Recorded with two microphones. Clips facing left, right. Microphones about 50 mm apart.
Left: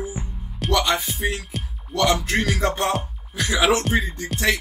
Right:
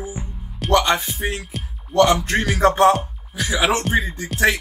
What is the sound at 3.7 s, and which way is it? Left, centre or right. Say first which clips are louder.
Speech: right 2 dB; centre.